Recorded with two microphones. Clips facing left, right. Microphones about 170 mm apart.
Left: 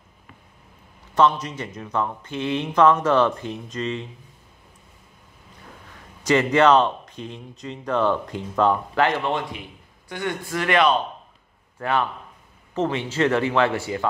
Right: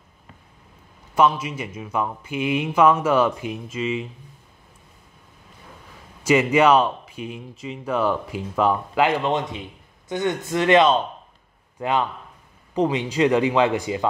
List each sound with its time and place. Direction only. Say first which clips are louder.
1.1 s speech: even; 10° right (ahead or behind)
6.2 s speech: even; 10° right (ahead or behind)